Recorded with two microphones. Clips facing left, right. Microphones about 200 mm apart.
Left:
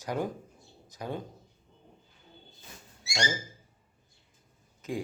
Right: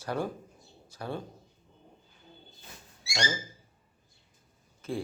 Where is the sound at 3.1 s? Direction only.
15° left (ahead or behind).